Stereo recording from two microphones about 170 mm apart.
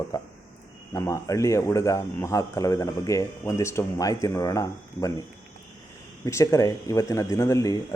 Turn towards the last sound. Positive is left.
turn(degrees=20)  # may be behind; listen again after turning